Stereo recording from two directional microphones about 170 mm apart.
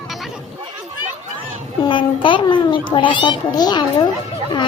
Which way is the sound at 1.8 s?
30° left (ahead or behind).